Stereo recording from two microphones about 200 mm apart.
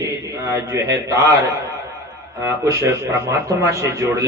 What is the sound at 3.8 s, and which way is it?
Speech, 15° right (ahead or behind).